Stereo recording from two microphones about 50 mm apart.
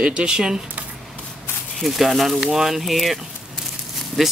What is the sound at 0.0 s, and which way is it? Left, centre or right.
Speech, right.